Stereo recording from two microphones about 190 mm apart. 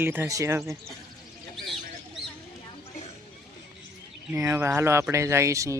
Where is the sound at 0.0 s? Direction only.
10° right (ahead or behind).